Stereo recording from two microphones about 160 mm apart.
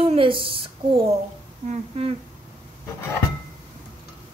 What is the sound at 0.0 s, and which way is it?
A woman's voice, 35° right (ahead or behind).